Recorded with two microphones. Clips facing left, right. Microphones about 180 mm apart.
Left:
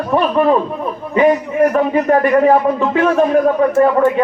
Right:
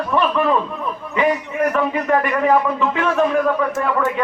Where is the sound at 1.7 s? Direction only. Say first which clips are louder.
Left 5 dB; 40° left (ahead or behind).